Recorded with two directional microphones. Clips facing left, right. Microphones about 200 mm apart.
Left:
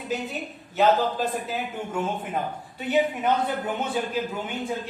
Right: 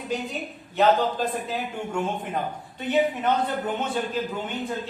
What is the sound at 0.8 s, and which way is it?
A man's voice, 5° left (ahead or behind).